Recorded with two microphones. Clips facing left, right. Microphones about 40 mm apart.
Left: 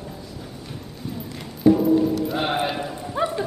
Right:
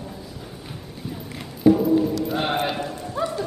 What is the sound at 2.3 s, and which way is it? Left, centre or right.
Clip-clop, centre.